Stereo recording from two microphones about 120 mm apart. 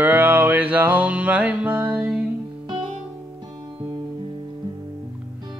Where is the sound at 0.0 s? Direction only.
15° right (ahead or behind).